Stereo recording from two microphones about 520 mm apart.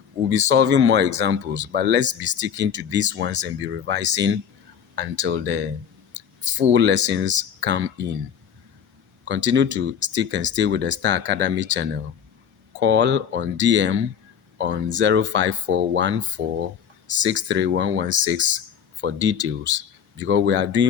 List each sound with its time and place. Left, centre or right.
0.3 s speech: right
9.2 s speech: right
17.2 s speech: right